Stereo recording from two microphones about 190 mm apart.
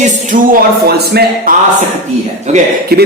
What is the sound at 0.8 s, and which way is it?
Speech, 55° right (ahead or behind).